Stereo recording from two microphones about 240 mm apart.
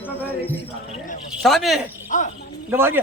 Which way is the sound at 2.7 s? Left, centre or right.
Centre.